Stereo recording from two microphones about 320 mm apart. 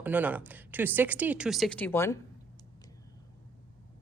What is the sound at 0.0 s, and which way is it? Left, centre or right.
Speech, centre.